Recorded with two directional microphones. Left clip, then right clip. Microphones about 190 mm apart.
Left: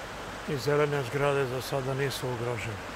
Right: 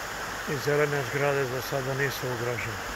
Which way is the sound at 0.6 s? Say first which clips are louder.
Right 1 dB; 15° left (ahead or behind).